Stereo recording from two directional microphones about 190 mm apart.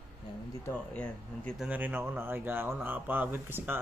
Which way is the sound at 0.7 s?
10° left (ahead or behind).